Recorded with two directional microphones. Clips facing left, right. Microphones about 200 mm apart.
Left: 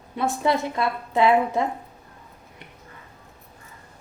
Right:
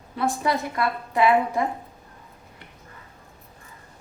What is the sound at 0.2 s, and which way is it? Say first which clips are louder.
A woman's voice: left 1 dB; 25° left (ahead or behind).